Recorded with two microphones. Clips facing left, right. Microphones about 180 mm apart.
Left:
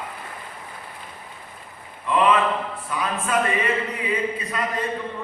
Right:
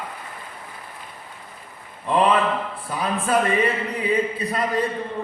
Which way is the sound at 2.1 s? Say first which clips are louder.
Right 1 dB; 35° right (ahead or behind).